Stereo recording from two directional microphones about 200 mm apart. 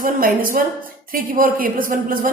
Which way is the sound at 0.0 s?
45° right (ahead or behind).